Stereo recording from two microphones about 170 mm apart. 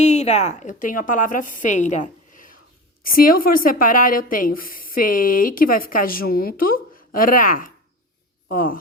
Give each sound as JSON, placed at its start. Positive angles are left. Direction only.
{"t": 0.0, "sound": "a woman's voice", "side_deg": 40}